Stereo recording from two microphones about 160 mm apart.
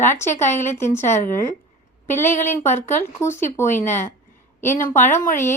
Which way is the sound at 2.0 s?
15° left (ahead or behind).